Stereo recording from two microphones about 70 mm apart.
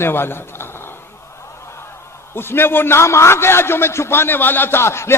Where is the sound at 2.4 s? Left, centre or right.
Left.